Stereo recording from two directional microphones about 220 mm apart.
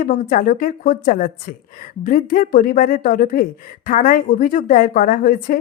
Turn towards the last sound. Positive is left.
turn(degrees=40)  # may be behind; listen again after turning